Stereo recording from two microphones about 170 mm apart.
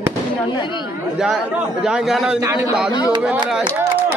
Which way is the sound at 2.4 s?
20° right (ahead or behind).